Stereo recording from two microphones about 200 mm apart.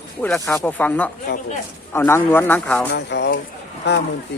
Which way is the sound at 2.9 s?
60° left (ahead or behind).